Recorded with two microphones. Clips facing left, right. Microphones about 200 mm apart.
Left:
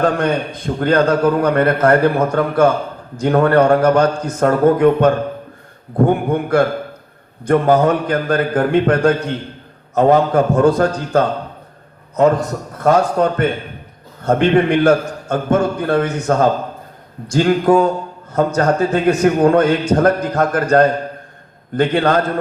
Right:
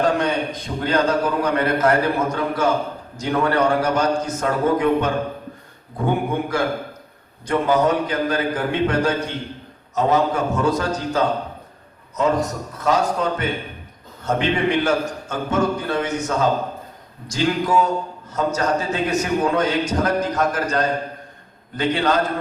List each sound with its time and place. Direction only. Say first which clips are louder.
0.2 s a man's voice: left 4 dB; 55° left (ahead or behind)